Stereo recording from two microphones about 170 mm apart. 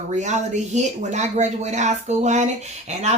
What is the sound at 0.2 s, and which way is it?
Speech, 45° right (ahead or behind).